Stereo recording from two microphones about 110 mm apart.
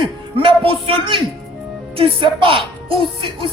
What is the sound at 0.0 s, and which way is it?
A man's voice, 55° right (ahead or behind).